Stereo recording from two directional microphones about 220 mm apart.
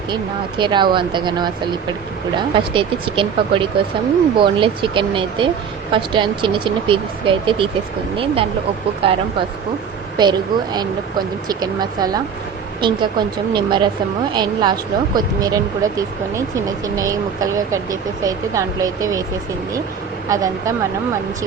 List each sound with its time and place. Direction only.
0.6 s speech: 20° right (ahead or behind)
20.3 s speech: 15° right (ahead or behind)